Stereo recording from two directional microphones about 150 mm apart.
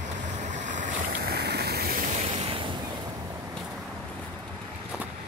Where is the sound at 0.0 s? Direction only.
55° right (ahead or behind); by 2.0 s 85° right.